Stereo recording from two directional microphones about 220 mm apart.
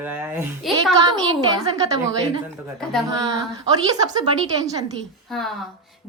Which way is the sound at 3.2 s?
15° right (ahead or behind).